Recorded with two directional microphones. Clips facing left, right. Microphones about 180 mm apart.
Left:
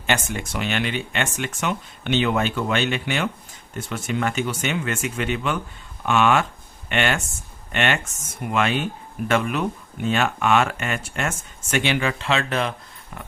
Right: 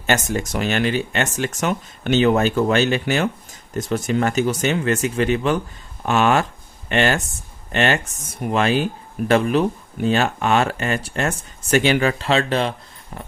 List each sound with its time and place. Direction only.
0.1 s speech: 40° right (ahead or behind)